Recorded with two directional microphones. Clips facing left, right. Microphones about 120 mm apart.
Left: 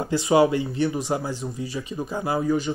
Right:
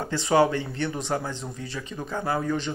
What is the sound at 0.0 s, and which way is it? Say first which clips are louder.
Speech: left 2 dB; 15° left (ahead or behind).